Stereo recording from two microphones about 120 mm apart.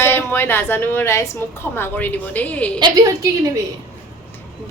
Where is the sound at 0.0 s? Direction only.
20° left (ahead or behind).